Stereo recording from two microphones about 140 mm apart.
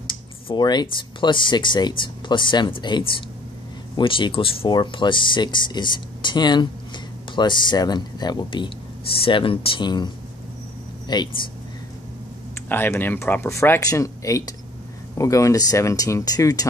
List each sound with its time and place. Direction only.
0.1 s speech: 35° left (ahead or behind)
12.6 s speech: 15° left (ahead or behind)